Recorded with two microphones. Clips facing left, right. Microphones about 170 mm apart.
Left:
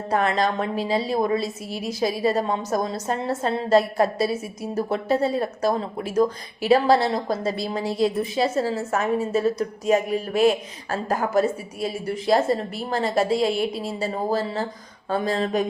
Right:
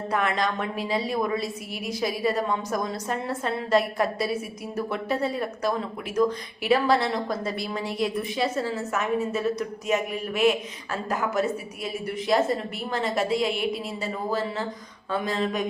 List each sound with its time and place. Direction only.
0.1 s a woman's voice: 35° left (ahead or behind)